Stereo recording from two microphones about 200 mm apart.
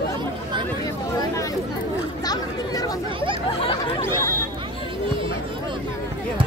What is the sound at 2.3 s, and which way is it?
Speech, 20° left (ahead or behind).